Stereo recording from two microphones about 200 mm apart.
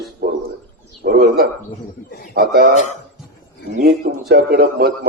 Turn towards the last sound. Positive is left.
turn(degrees=-50)  # may be behind; listen again after turning